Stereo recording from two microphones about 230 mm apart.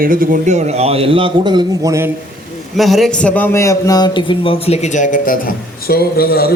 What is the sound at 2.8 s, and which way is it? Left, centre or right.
A man's voice, centre.